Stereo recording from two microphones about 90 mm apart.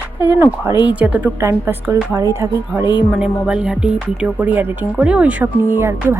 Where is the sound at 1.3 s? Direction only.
30° right (ahead or behind).